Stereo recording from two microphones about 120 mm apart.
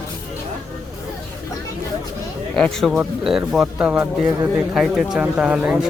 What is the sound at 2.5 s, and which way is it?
Speech, 5° left (ahead or behind).